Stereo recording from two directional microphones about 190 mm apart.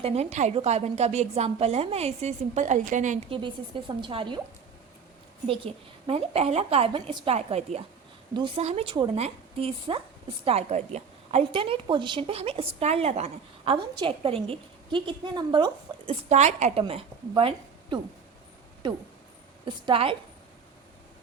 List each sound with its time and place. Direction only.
0.0 s a woman's voice: 35° right (ahead or behind)
3.3 s a woman's voice: 25° right (ahead or behind)
5.5 s a woman's voice: 30° right (ahead or behind)
16.3 s a woman's voice: 35° right (ahead or behind)
19.6 s a woman's voice: 25° right (ahead or behind)